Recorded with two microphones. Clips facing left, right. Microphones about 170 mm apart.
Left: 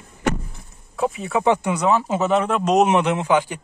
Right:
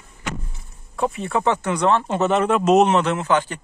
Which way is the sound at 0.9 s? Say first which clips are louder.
Even; centre (ahead or behind).